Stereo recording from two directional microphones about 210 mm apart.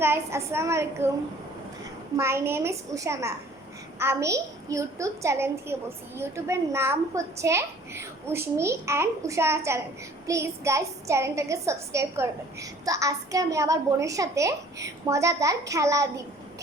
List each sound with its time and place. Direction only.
0.0 s a child's voice: 10° right (ahead or behind)
2.1 s a child's voice: 10° right (ahead or behind)